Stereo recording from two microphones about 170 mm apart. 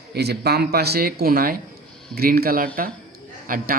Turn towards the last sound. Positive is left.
turn(degrees=-55)  # may be behind; listen again after turning